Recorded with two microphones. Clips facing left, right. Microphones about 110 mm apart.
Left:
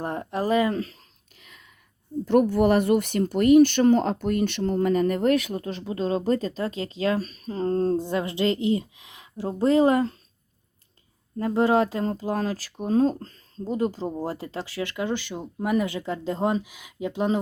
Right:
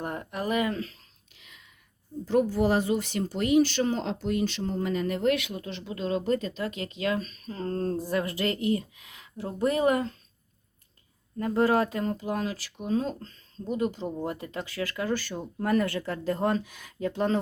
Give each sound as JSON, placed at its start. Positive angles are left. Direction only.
{"t": 0.0, "sound": "a sound", "side_deg": 30}
{"t": 2.2, "sound": "speech", "side_deg": 60}
{"t": 11.3, "sound": "speech", "side_deg": 25}
{"t": 13.7, "sound": "speech", "side_deg": 30}